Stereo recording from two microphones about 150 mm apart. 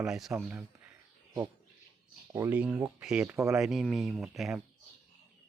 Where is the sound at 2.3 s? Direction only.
20° right (ahead or behind).